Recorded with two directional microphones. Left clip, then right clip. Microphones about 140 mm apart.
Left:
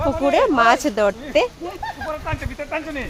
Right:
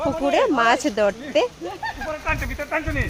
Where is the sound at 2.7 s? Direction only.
Centre (ahead or behind).